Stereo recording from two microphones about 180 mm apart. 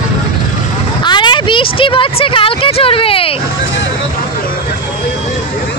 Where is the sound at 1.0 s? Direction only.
25° left (ahead or behind).